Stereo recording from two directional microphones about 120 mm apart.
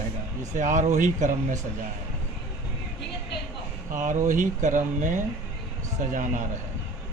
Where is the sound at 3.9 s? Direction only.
90° right.